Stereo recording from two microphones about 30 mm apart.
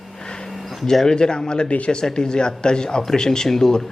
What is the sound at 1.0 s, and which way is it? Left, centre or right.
A man's voice, left.